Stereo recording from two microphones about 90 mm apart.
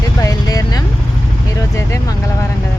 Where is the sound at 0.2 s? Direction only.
40° left (ahead or behind).